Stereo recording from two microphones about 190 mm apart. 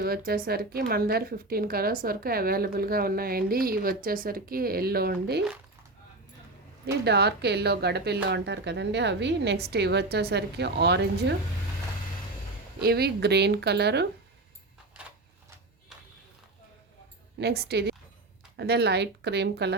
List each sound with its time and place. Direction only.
0.0 s a woman's voice: 55° right (ahead or behind)
7.0 s speech: 60° right (ahead or behind)
12.8 s speech: 55° right (ahead or behind)
17.4 s speech: 60° right (ahead or behind)